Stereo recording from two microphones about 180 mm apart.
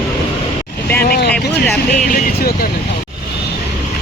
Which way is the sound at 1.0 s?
60° left (ahead or behind).